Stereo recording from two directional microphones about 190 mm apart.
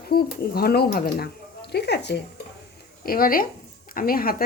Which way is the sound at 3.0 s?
50° left (ahead or behind).